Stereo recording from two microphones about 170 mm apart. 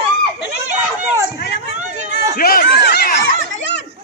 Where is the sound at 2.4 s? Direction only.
65° left (ahead or behind).